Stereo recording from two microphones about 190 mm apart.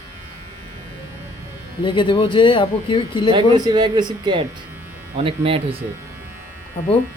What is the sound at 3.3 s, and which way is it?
Speech, 20° right (ahead or behind).